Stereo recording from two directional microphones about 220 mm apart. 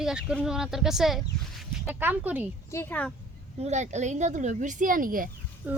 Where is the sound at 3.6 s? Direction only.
30° right (ahead or behind).